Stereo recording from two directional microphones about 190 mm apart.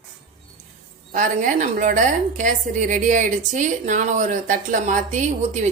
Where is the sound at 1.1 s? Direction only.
45° right (ahead or behind).